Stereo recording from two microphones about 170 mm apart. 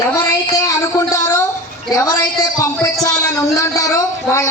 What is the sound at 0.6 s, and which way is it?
A man's voice, 20° left (ahead or behind).